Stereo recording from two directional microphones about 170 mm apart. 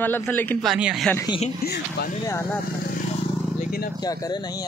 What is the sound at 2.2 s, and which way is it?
Speech, 15° left (ahead or behind).